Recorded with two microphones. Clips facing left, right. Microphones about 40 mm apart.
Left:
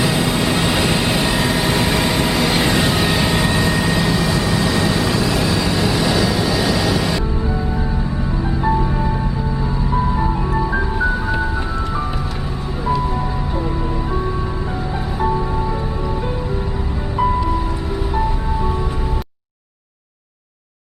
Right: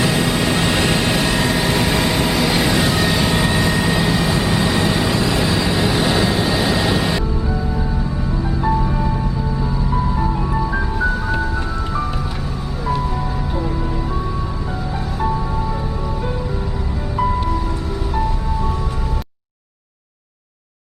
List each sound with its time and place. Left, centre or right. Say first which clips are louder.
0.0 s vehicle: even; centre
5.8 s vehicle: even; right
7.4 s music: left 1 dB; centre
18.1 s music: even; centre